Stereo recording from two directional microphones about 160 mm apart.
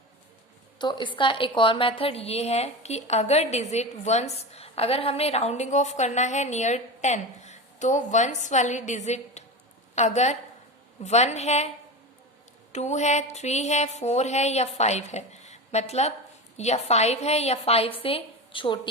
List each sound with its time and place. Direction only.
0.8 s a woman's voice: 30° left (ahead or behind); by 11.7 s 45° left (ahead or behind)
12.7 s a woman's voice: 45° left (ahead or behind)